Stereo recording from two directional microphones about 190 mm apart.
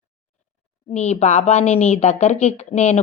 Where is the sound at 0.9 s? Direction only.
35° left (ahead or behind).